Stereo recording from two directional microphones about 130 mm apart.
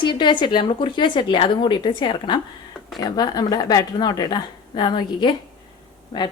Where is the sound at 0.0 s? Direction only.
40° left (ahead or behind).